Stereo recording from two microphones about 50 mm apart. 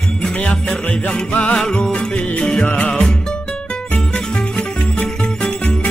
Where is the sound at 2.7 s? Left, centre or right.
Left.